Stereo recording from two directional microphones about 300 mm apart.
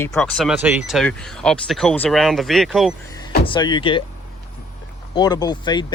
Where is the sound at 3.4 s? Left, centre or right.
Centre.